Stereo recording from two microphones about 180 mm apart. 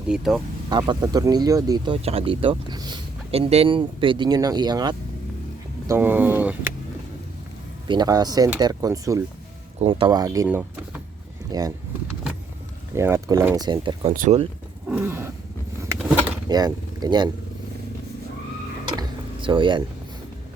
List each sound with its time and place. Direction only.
0.1 s speech: centre (ahead or behind)
0.7 s speech: 25° right (ahead or behind)
5.9 s speech: 10° right (ahead or behind)
7.9 s speech: 20° right (ahead or behind)
9.8 s speech: 30° right (ahead or behind); by 11.0 s 10° right (ahead or behind)
11.5 s speech: 20° right (ahead or behind)
12.9 s speech: 15° right (ahead or behind)
13.7 s speech: 30° right (ahead or behind)
14.1 s speech: 50° right (ahead or behind)
14.8 s speech: 10° right (ahead or behind)
16.5 s speech: 20° right (ahead or behind)
18.9 s a sound: 25° right (ahead or behind)